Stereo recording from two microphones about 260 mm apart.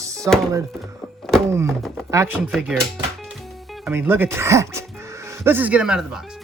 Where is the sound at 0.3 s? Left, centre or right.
Centre.